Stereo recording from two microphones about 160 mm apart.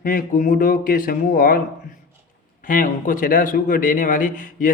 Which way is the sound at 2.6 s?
60° left (ahead or behind).